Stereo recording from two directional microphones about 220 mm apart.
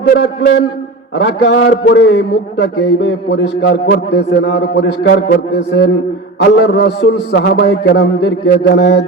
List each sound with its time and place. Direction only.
0.1 s a man's voice: 50° left (ahead or behind)